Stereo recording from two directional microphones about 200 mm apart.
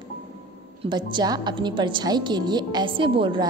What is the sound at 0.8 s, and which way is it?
A woman's voice, 20° right (ahead or behind).